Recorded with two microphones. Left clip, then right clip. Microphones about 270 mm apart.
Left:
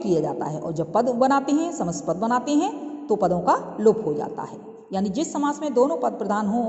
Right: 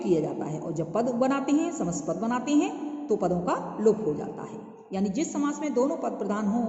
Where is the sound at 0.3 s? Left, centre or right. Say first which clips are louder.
Left 5 dB; centre.